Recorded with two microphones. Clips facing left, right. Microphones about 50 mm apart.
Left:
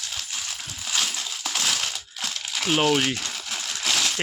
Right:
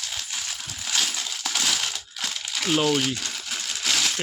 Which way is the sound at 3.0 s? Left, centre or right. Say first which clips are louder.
Left 2 dB; left.